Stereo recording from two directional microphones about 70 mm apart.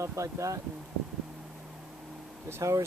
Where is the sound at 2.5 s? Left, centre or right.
Right.